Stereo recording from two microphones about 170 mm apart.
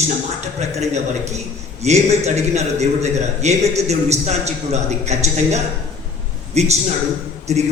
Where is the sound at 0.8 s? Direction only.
40° right (ahead or behind).